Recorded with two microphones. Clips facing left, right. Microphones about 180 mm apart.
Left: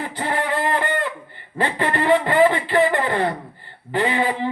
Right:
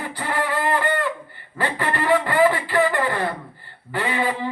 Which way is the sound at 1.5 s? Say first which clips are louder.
Left 3 dB; 20° left (ahead or behind).